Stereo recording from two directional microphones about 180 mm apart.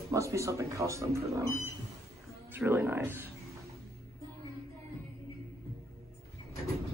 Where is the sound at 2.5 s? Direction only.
15° right (ahead or behind).